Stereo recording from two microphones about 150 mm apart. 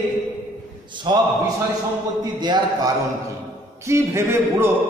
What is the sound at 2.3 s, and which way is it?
Speech, 30° right (ahead or behind).